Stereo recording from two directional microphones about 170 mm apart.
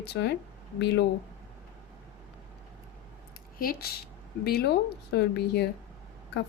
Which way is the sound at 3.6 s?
60° left (ahead or behind).